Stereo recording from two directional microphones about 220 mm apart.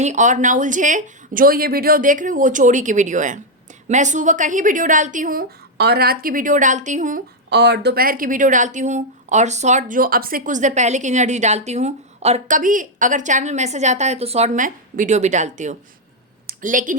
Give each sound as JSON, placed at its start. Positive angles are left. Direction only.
{"t": 0.0, "sound": "a woman's voice", "side_deg": -35}
{"t": 7.5, "sound": "a woman's voice", "side_deg": -50}
{"t": 16.5, "sound": "a sound", "side_deg": -35}